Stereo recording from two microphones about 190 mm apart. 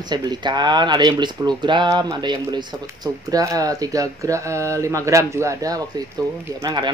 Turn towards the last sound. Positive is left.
turn(degrees=-20)  # may be behind; listen again after turning